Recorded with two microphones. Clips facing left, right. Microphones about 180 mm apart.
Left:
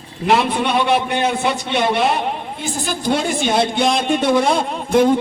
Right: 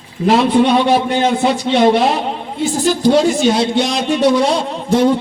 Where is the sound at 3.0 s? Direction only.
55° left (ahead or behind).